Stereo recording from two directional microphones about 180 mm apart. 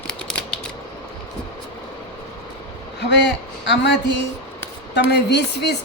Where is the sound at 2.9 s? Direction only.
75° left (ahead or behind).